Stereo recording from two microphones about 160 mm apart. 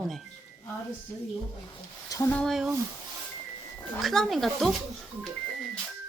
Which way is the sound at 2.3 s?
Centre (ahead or behind).